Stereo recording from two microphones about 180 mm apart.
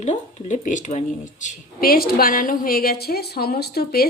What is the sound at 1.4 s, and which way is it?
A woman's voice, 55° left (ahead or behind).